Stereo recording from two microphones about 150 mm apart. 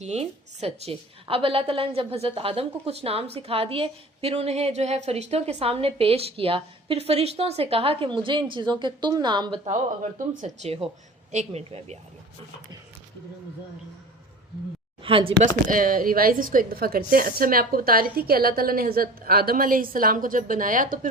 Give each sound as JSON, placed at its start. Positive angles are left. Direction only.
{"t": 0.0, "sound": "a woman's voice", "side_deg": -45}
{"t": 9.6, "sound": "speech", "side_deg": -55}
{"t": 15.0, "sound": "a woman's voice", "side_deg": -35}
{"t": 15.7, "sound": "a woman's voice", "side_deg": -70}